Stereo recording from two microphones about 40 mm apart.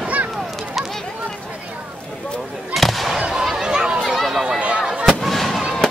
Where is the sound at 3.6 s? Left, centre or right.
Centre.